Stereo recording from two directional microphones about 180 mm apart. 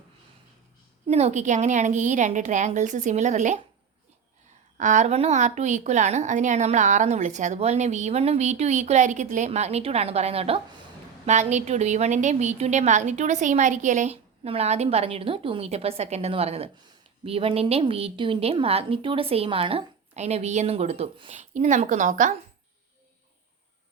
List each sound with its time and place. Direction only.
1.0 s a woman's voice: 35° right (ahead or behind)
4.8 s a woman's voice: 40° right (ahead or behind)